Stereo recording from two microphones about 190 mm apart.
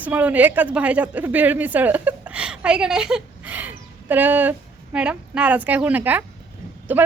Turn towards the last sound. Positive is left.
turn(degrees=-10)  # may be behind; listen again after turning